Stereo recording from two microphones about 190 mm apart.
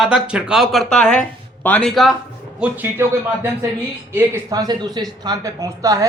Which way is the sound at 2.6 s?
10° right (ahead or behind).